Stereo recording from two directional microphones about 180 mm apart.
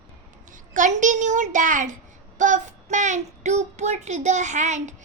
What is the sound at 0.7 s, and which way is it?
A child's voice, 45° right (ahead or behind).